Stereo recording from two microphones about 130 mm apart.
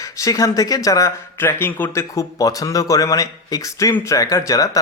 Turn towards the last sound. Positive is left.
turn(degrees=25)  # may be behind; listen again after turning